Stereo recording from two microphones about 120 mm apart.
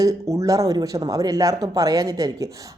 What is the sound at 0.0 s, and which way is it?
A woman's voice, 30° right (ahead or behind).